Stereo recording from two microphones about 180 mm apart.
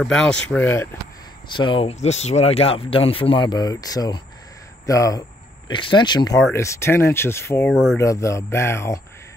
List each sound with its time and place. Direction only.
0.0 s speech: 5° left (ahead or behind)
1.5 s speech: 25° left (ahead or behind)
7.7 s speech: 5° right (ahead or behind)
8.0 s speech: 15° left (ahead or behind)